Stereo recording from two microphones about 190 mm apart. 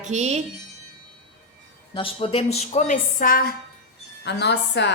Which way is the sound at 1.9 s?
30° left (ahead or behind).